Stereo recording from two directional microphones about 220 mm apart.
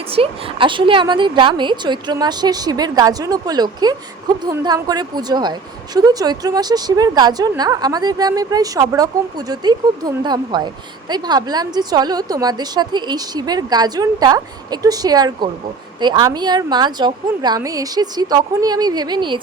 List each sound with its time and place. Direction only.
0.1 s a woman's voice: 25° right (ahead or behind)